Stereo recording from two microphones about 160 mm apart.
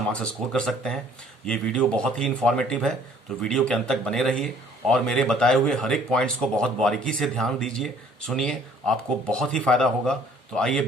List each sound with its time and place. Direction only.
0.1 s a man's voice: 5° left (ahead or behind)